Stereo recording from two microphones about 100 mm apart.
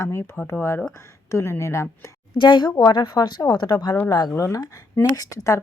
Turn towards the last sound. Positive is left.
turn(degrees=35)  # may be behind; listen again after turning